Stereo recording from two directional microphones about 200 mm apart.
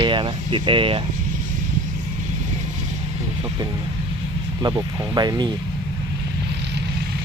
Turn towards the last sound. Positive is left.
turn(degrees=-20)  # may be behind; listen again after turning